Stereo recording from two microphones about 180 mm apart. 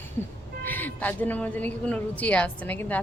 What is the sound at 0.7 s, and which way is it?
A woman's voice, 10° left (ahead or behind).